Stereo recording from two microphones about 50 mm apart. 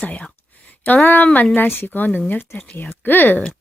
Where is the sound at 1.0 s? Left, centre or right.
Left.